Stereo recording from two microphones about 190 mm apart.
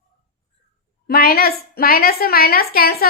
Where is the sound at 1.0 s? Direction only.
55° left (ahead or behind).